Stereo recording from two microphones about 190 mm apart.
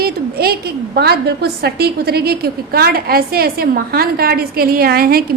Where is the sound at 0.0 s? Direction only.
55° right (ahead or behind).